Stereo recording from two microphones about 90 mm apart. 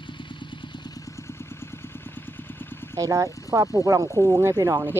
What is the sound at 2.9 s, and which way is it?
Speech, 40° right (ahead or behind).